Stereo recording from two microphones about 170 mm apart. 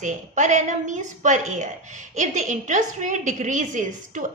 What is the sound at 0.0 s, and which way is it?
A woman's voice, 45° right (ahead or behind).